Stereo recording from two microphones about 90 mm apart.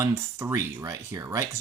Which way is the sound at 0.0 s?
30° right (ahead or behind).